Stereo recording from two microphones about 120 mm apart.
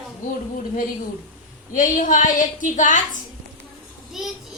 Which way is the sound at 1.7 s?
90° left.